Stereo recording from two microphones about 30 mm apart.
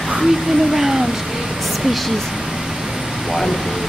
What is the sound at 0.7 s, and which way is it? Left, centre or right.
Speech, centre.